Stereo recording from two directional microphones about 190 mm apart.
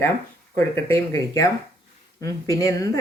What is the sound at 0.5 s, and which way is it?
Speech, 15° left (ahead or behind).